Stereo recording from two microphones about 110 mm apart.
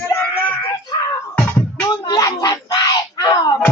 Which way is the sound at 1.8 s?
35° left (ahead or behind).